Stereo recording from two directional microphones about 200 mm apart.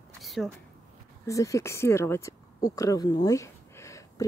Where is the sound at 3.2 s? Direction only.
15° left (ahead or behind).